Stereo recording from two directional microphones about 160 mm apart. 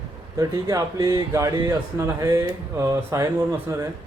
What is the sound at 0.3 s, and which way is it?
A man's voice, 20° right (ahead or behind).